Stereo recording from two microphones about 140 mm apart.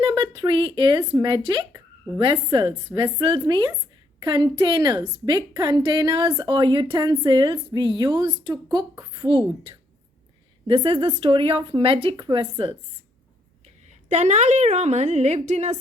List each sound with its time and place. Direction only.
0.2 s a woman's voice: 35° right (ahead or behind)
14.1 s a woman's voice: 55° right (ahead or behind)